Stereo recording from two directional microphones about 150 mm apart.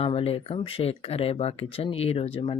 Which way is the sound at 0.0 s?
40° left (ahead or behind).